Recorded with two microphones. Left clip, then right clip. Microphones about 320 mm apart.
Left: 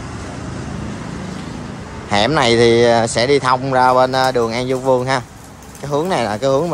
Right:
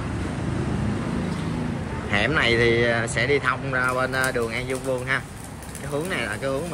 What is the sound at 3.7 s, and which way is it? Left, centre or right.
Speech, left.